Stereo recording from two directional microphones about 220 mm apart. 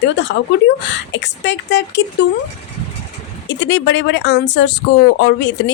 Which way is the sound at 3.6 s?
55° left (ahead or behind).